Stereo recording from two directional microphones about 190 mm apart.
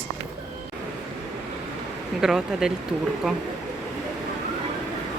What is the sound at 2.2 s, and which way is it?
Speech, centre (ahead or behind).